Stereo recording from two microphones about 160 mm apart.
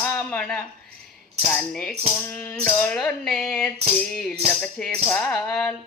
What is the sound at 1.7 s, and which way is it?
Music, 5° left (ahead or behind).